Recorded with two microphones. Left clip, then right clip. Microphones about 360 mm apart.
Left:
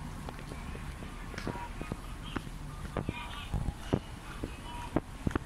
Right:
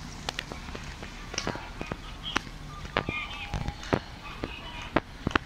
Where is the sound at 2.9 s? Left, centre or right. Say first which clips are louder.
Right 9 dB; right.